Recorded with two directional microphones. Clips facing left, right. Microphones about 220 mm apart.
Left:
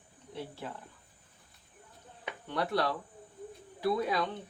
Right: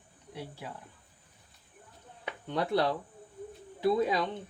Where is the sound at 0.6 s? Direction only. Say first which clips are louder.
Left 1 dB; 10° right (ahead or behind).